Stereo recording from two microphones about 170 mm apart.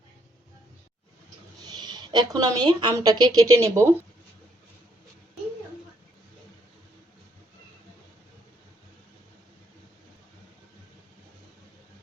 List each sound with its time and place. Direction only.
1.6 s a woman's voice: 25° right (ahead or behind)